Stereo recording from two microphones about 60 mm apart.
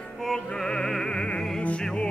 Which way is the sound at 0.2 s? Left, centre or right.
Centre.